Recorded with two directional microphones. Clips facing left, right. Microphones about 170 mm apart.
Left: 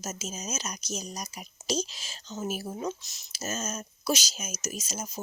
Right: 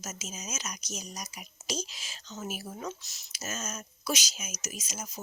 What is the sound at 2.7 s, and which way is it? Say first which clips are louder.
Speech: left 5 dB; 20° left (ahead or behind).